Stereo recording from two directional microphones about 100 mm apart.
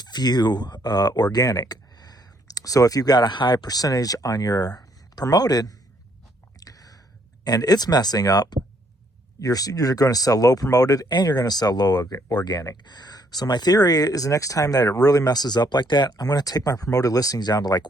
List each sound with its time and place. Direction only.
0.0 s speech: 45° left (ahead or behind)
6.6 s a sound: 40° left (ahead or behind)
7.4 s speech: 40° left (ahead or behind)